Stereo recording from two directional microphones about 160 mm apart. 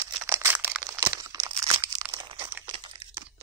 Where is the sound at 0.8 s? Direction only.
25° right (ahead or behind).